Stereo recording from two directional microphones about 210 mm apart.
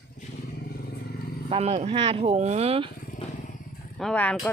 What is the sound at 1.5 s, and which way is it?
Speech, 30° right (ahead or behind).